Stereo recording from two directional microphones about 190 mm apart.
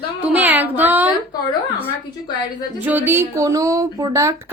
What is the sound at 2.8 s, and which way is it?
Speech, 10° right (ahead or behind).